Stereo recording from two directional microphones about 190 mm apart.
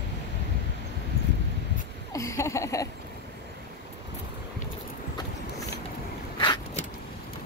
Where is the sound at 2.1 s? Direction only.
15° left (ahead or behind).